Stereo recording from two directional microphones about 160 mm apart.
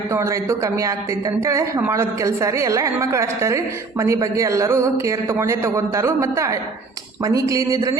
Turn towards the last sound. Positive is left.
turn(degrees=-20)  # may be behind; listen again after turning